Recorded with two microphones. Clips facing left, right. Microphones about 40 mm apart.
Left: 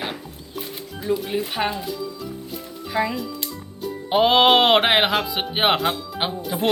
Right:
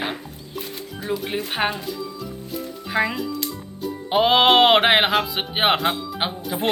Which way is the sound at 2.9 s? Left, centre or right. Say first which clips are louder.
Right 1 dB; right.